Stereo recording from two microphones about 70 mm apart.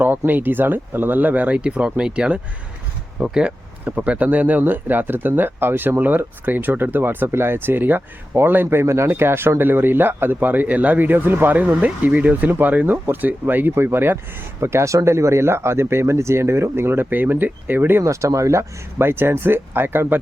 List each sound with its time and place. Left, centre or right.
0.3 s speech: right
18.0 s speech: right